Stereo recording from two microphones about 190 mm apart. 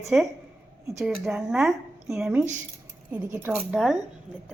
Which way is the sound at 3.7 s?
Centre (ahead or behind).